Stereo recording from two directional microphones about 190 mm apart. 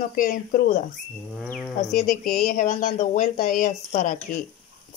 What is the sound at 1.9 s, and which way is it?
Speech, 45° left (ahead or behind).